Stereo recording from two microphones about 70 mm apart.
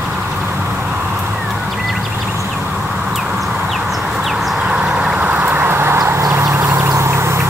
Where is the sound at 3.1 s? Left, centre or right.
Centre.